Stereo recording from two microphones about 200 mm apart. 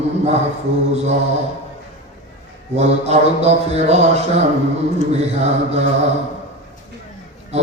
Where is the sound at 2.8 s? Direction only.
35° right (ahead or behind).